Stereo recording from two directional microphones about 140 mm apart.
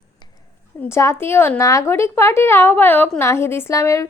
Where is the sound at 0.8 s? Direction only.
20° left (ahead or behind).